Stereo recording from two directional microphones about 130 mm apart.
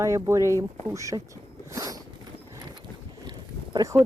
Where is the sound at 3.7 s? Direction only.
25° right (ahead or behind).